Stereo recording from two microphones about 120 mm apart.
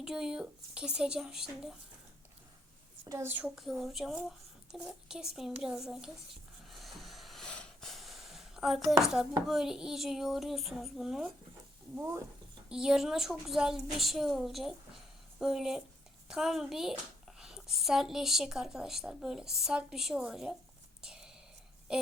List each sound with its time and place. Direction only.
0.0 s a woman's voice: 5° right (ahead or behind)
3.1 s a woman's voice: 20° right (ahead or behind)
3.6 s a woman's voice: centre (ahead or behind)
6.7 s a sound: centre (ahead or behind)
9.5 s a woman's voice: 5° right (ahead or behind)
11.9 s speech: 25° right (ahead or behind)
12.6 s a woman's voice: 5° right (ahead or behind)
21.0 s whispering: 5° right (ahead or behind)